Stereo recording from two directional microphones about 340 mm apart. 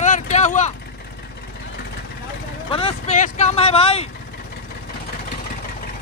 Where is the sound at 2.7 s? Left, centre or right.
Centre.